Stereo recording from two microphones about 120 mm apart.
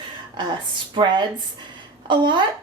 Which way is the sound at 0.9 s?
40° right (ahead or behind).